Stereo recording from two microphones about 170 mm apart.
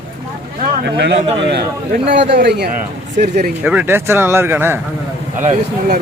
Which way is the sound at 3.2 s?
45° right (ahead or behind).